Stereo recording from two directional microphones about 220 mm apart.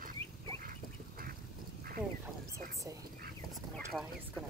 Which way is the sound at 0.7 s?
40° right (ahead or behind).